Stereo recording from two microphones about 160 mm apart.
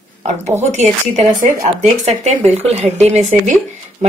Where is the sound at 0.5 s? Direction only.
45° right (ahead or behind).